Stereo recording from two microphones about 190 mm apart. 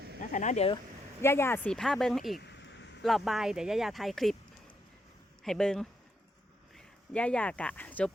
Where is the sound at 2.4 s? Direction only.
65° left (ahead or behind).